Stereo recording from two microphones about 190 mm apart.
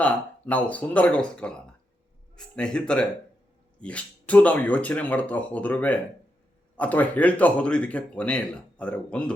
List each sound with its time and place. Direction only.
0.0 s speech: 10° left (ahead or behind)